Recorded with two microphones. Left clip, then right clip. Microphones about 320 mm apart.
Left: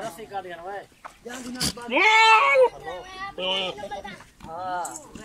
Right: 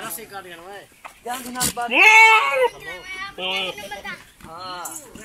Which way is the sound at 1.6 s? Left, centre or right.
Centre.